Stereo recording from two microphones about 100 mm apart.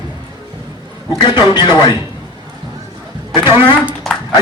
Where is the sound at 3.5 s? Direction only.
55° left (ahead or behind).